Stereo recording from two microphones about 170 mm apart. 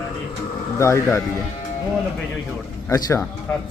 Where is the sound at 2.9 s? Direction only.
20° left (ahead or behind).